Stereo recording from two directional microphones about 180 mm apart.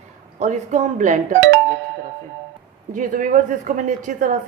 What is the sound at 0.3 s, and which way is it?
Speech, 40° right (ahead or behind).